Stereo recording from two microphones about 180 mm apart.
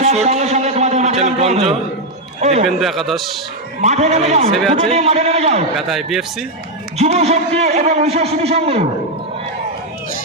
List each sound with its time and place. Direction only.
0.0 s a sound: 35° right (ahead or behind)
2.4 s a man's voice: 35° right (ahead or behind)
2.6 s a man's voice: centre (ahead or behind)
3.8 s a man's voice: 40° right (ahead or behind)
5.7 s a man's voice: centre (ahead or behind)
7.0 s a man's voice: 35° right (ahead or behind)